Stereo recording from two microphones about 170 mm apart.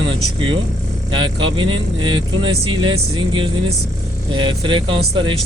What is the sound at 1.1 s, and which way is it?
Speech, 30° right (ahead or behind).